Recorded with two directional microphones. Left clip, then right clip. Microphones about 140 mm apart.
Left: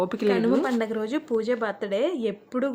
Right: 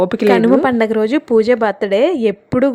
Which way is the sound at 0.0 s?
40° right (ahead or behind).